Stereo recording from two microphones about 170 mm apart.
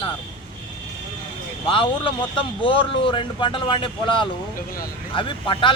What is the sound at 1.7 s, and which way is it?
Speech, 30° left (ahead or behind).